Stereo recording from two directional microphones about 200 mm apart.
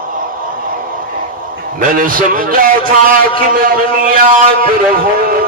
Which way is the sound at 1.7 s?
45° right (ahead or behind).